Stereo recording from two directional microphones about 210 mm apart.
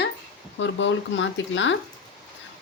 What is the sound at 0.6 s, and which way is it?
A woman's voice, 60° left (ahead or behind).